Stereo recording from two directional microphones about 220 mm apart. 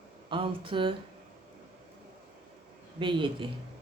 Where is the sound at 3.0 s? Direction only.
20° right (ahead or behind).